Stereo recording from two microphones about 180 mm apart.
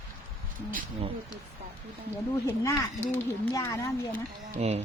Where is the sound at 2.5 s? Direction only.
15° left (ahead or behind).